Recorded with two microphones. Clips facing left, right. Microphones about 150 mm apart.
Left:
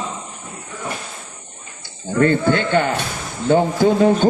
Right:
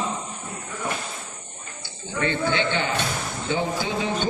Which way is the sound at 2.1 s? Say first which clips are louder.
Left 8 dB; 45° left (ahead or behind).